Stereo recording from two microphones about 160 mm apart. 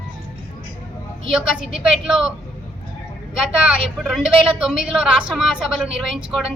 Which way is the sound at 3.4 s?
5° right (ahead or behind).